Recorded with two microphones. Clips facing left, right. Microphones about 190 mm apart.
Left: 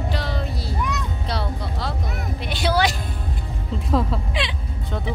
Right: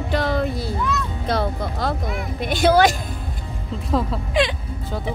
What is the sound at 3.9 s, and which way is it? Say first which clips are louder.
Speech: even; centre (ahead or behind).